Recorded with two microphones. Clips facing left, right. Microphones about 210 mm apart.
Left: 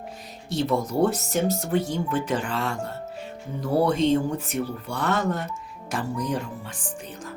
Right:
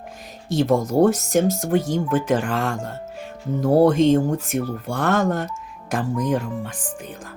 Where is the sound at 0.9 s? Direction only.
45° right (ahead or behind).